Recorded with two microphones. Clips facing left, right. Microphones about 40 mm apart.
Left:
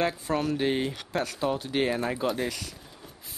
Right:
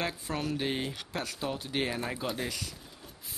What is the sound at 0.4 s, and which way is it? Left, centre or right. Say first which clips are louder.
Speech: left 5 dB; left.